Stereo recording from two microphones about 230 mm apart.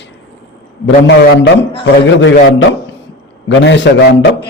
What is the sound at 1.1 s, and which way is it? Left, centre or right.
A man's voice, left.